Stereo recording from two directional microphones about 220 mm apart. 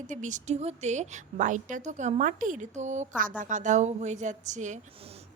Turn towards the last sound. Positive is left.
turn(degrees=-35)  # may be behind; listen again after turning